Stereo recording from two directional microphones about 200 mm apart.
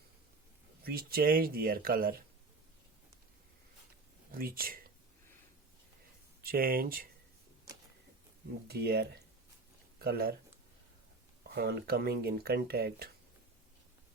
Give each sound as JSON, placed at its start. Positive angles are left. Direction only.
{"t": 0.9, "sound": "speech", "side_deg": -50}
{"t": 4.3, "sound": "speech", "side_deg": -45}
{"t": 6.4, "sound": "speech", "side_deg": -50}
{"t": 8.6, "sound": "speech", "side_deg": -50}
{"t": 11.4, "sound": "speech", "side_deg": -50}